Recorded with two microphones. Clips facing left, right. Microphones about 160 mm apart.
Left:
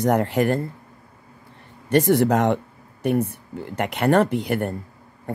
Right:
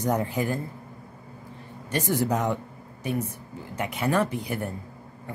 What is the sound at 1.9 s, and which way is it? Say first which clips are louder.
Speech: left 8 dB; 65° left (ahead or behind).